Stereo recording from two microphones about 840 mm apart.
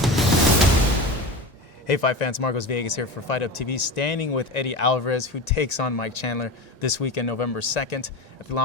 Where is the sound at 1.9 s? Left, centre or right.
Left.